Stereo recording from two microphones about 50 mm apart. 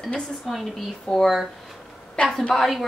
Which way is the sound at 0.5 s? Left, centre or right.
Centre.